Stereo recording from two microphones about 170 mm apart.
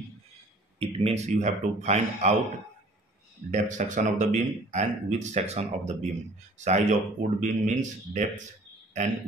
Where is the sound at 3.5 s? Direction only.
45° right (ahead or behind).